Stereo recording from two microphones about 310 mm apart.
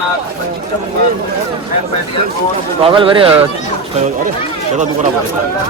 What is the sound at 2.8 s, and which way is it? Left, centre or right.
Speech, centre.